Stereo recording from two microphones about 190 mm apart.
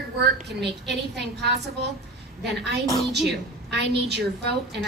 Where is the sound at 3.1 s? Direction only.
60° right (ahead or behind).